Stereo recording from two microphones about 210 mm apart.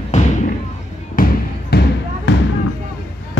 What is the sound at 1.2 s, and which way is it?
Basketball bounce, 40° left (ahead or behind).